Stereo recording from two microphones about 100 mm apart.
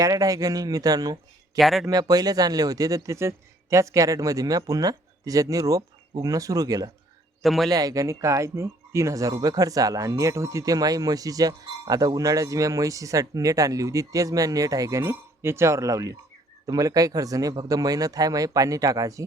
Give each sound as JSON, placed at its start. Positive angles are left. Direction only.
{"t": 0.0, "sound": "speech", "side_deg": -35}
{"t": 1.5, "sound": "a man's voice", "side_deg": 0}
{"t": 1.9, "sound": "speech", "side_deg": -40}
{"t": 7.4, "sound": "a man's voice", "side_deg": 0}
{"t": 7.7, "sound": "speech", "side_deg": -40}